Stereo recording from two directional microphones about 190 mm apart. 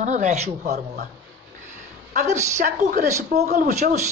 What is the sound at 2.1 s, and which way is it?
Speech, 40° right (ahead or behind).